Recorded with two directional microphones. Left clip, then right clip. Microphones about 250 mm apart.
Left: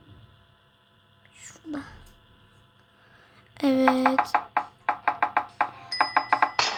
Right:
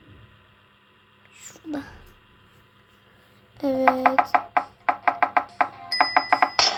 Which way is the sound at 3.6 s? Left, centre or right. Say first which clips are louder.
Even; left.